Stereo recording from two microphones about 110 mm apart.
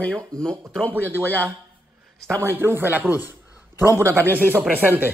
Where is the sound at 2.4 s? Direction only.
20° right (ahead or behind).